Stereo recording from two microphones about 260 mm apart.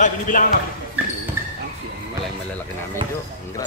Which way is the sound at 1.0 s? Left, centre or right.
Centre.